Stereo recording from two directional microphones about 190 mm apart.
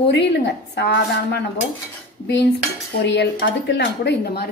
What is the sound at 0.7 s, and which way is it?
Speech, 60° left (ahead or behind).